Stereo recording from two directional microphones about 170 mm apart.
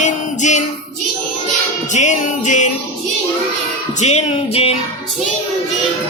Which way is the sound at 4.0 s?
40° left (ahead or behind).